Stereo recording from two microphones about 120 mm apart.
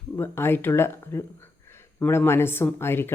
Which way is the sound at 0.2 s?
20° left (ahead or behind).